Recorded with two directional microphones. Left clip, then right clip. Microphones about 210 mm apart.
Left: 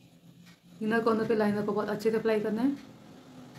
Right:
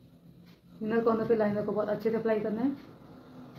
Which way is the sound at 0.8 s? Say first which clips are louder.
Even; 20° left (ahead or behind).